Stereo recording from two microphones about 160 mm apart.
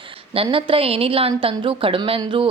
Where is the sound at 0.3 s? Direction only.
35° right (ahead or behind).